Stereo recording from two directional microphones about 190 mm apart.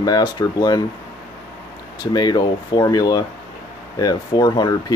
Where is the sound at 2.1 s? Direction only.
20° left (ahead or behind).